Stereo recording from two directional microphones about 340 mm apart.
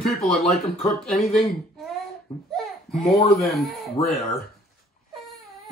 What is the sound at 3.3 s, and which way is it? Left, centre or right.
Speech, centre.